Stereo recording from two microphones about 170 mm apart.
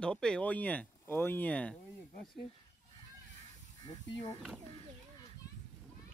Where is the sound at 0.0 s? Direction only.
5° left (ahead or behind).